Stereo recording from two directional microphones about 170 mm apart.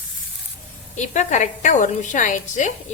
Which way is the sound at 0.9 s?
45° left (ahead or behind).